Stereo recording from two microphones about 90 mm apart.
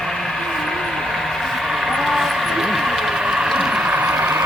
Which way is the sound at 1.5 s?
Centre (ahead or behind).